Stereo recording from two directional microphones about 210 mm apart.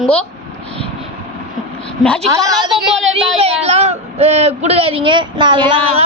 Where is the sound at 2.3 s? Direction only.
15° right (ahead or behind).